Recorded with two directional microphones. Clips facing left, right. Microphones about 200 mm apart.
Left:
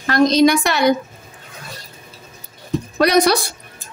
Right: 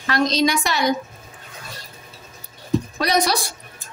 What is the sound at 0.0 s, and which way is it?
Speech, 50° left (ahead or behind).